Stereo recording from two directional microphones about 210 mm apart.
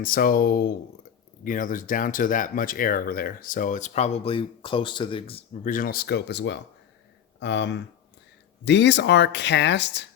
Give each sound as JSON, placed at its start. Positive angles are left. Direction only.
{"t": 0.0, "sound": "speech", "side_deg": 40}